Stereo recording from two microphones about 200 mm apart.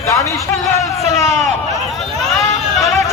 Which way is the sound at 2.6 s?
Centre (ahead or behind).